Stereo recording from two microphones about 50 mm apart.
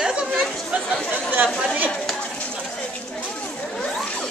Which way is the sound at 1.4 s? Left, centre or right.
Centre.